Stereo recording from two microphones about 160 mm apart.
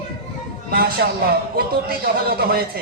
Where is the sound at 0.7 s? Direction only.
75° right (ahead or behind).